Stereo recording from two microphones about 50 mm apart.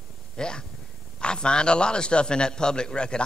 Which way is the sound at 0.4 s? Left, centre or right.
Centre.